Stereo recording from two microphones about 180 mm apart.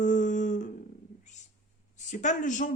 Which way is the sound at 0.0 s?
45° left (ahead or behind).